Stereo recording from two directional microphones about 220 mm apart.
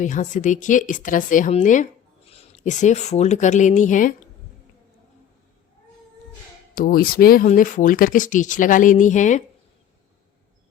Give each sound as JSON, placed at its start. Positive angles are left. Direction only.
{"t": 0.0, "sound": "speech", "side_deg": 35}
{"t": 6.7, "sound": "speech", "side_deg": 40}